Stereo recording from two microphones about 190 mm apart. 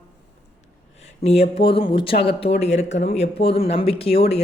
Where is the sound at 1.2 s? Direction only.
35° left (ahead or behind).